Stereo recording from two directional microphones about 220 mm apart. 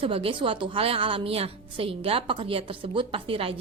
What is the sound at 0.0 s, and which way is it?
A woman's voice, 25° right (ahead or behind).